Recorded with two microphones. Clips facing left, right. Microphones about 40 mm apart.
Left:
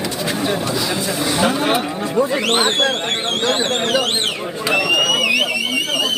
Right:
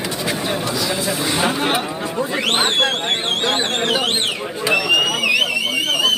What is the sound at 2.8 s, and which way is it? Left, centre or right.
Speech, right.